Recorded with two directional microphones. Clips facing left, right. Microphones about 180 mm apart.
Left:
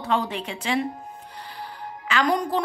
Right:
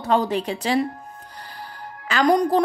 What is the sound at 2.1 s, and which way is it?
Speech, 40° right (ahead or behind).